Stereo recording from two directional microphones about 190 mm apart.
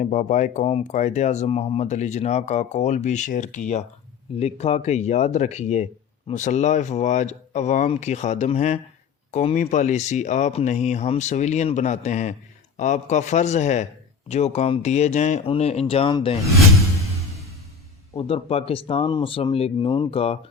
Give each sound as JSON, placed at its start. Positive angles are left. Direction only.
{"t": 0.0, "sound": "speech", "side_deg": 40}
{"t": 18.2, "sound": "speech", "side_deg": 30}